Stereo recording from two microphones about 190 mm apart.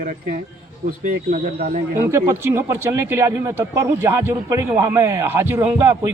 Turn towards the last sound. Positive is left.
turn(degrees=-10)  # may be behind; listen again after turning